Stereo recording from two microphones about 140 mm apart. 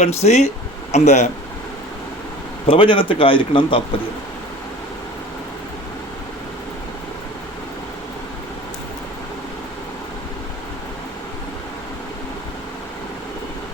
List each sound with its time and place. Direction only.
0.0 s speech: 50° left (ahead or behind)
2.6 s a man's voice: 40° left (ahead or behind)